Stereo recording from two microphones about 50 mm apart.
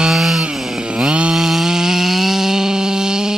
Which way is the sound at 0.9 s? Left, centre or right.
Right.